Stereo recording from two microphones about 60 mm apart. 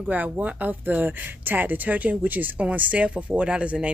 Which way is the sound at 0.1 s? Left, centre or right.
Right.